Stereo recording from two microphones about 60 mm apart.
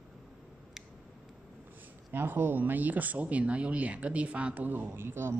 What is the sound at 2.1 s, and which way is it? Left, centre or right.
Speech, right.